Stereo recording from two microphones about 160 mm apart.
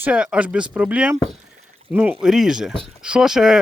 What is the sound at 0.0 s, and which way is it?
Speech, 5° right (ahead or behind).